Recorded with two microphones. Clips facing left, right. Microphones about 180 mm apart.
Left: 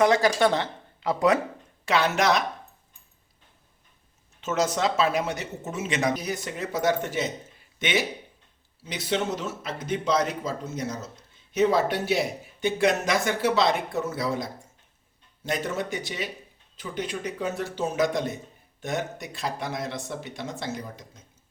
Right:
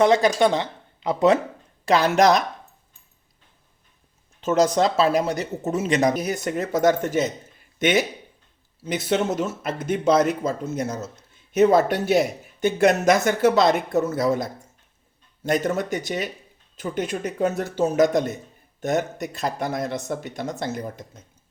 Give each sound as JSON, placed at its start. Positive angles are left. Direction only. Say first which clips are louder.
{"t": 0.0, "sound": "speech", "louder": "right 3 dB", "side_deg": -20}
{"t": 1.8, "sound": "speech", "louder": "right 6 dB", "side_deg": -35}
{"t": 4.4, "sound": "speech", "louder": "right 7 dB", "side_deg": -35}
{"t": 9.0, "sound": "speech", "louder": "right 4 dB", "side_deg": -50}